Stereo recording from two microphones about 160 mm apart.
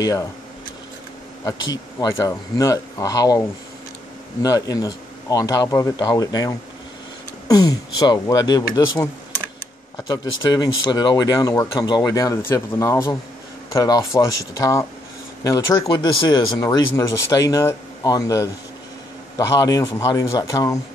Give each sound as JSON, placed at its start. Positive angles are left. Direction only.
{"t": 1.4, "sound": "speech", "side_deg": 20}